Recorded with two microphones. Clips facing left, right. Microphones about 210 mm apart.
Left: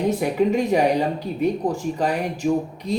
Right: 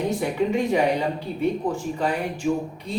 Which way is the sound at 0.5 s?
40° left (ahead or behind).